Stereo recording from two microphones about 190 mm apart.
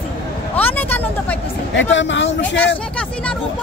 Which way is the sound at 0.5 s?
10° left (ahead or behind).